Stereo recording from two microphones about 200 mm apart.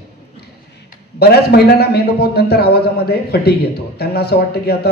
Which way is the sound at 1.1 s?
55° left (ahead or behind).